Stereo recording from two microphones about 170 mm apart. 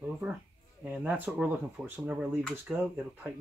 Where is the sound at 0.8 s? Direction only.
10° right (ahead or behind).